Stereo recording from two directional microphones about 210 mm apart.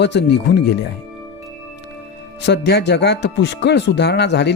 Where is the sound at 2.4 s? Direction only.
55° left (ahead or behind).